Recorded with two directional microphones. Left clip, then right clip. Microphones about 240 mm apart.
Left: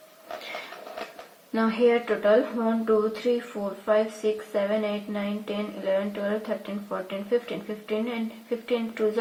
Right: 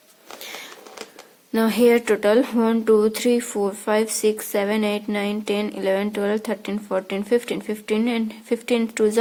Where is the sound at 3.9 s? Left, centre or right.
Right.